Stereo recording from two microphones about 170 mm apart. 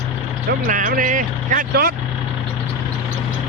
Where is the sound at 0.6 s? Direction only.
50° right (ahead or behind).